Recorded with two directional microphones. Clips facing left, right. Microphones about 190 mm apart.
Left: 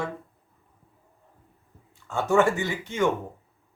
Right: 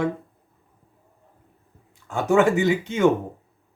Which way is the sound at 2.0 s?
15° right (ahead or behind).